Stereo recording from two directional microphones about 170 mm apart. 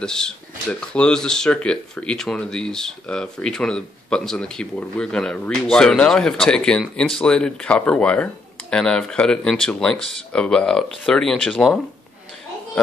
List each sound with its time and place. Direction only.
0.0 s speech: 5° left (ahead or behind)